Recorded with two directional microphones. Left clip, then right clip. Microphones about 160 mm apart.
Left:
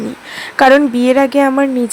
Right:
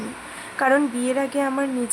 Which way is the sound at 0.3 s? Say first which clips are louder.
Left 11 dB; 50° left (ahead or behind).